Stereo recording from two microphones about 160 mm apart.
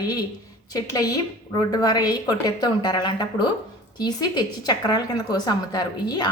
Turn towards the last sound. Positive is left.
turn(degrees=25)  # may be behind; listen again after turning